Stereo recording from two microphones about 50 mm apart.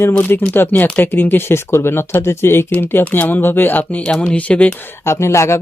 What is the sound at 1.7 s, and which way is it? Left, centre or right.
Speech, left.